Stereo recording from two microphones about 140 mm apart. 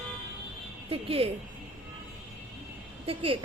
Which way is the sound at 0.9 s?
45° right (ahead or behind).